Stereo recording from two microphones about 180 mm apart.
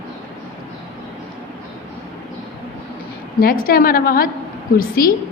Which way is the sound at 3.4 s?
55° left (ahead or behind).